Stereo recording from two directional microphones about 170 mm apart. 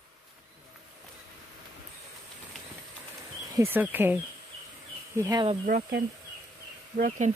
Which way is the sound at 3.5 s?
10° right (ahead or behind).